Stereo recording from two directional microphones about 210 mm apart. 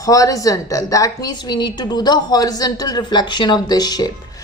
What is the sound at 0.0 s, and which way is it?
A woman's voice, 15° left (ahead or behind).